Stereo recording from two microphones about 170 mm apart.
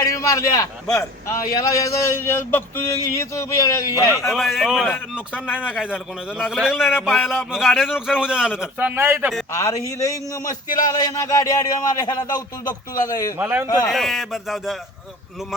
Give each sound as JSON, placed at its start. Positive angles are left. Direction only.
{"t": 0.0, "sound": "a man's voice", "side_deg": 20}
{"t": 4.3, "sound": "a man's voice", "side_deg": 0}
{"t": 9.5, "sound": "a man's voice", "side_deg": 15}
{"t": 13.4, "sound": "a man's voice", "side_deg": -10}
{"t": 13.8, "sound": "a man's voice", "side_deg": 0}